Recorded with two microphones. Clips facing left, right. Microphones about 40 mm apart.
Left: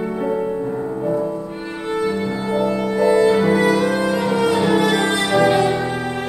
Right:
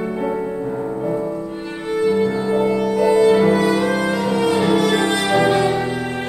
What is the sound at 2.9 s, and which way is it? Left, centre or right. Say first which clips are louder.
Music: left 1 dB; left.